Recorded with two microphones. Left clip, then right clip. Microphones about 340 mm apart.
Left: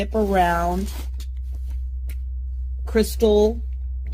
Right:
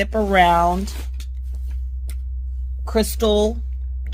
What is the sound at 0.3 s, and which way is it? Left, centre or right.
Speech, right.